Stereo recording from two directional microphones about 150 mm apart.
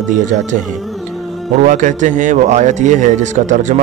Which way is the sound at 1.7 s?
60° right (ahead or behind).